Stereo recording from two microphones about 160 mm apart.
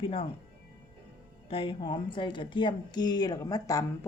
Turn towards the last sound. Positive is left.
turn(degrees=20)  # may be behind; listen again after turning